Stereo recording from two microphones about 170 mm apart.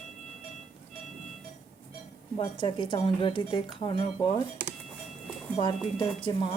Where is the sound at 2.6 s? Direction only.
30° left (ahead or behind).